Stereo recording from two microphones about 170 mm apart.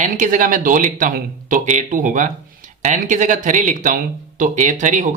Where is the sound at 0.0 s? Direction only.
50° right (ahead or behind).